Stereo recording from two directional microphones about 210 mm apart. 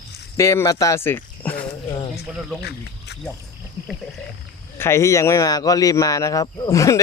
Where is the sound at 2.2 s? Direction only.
50° left (ahead or behind).